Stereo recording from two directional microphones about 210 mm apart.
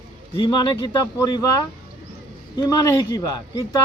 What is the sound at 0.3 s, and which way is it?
A man's voice, 20° left (ahead or behind).